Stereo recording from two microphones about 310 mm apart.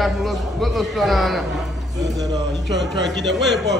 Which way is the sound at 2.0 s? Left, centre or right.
Centre.